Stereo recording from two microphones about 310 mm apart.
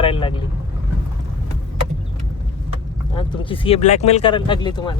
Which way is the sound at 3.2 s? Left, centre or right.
Centre.